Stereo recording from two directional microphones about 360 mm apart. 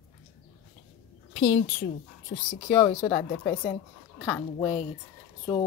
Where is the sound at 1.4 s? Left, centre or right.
Left.